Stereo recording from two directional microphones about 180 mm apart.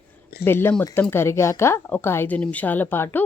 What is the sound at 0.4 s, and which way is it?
A woman's voice, 10° left (ahead or behind).